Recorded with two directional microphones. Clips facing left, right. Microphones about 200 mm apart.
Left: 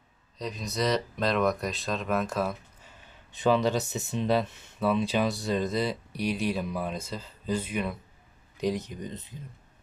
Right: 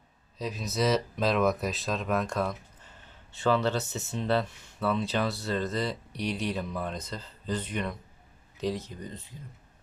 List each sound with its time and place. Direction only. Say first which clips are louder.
0.3 s speech: right 1 dB; 5° right (ahead or behind)
3.3 s speech: left 2 dB; 15° left (ahead or behind)